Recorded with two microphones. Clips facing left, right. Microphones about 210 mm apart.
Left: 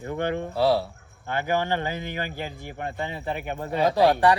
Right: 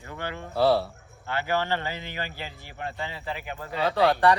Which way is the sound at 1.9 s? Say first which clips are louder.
Left 4 dB; 50° left (ahead or behind).